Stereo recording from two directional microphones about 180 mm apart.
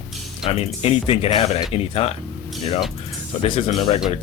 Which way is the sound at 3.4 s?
30° left (ahead or behind).